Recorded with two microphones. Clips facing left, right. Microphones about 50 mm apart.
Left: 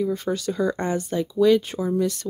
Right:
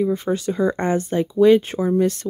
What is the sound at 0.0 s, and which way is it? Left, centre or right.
Speech, right.